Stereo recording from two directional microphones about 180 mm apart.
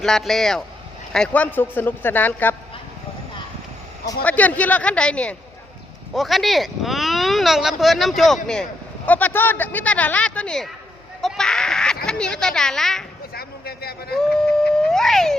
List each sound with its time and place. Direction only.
0.0 s speech: centre (ahead or behind)
4.2 s speech: 10° left (ahead or behind)
11.2 s a sound: centre (ahead or behind)
12.0 s speech: 5° left (ahead or behind)
13.3 s a sound: 60° left (ahead or behind)
14.8 s cat: centre (ahead or behind)